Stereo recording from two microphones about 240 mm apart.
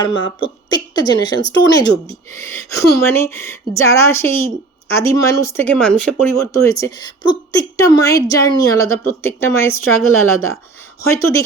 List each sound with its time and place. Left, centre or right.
0.0 s a woman's voice: centre